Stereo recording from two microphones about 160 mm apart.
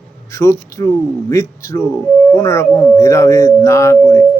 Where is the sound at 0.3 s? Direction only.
20° left (ahead or behind).